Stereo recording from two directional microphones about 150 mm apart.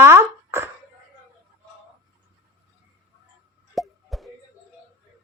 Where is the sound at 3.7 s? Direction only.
Centre (ahead or behind).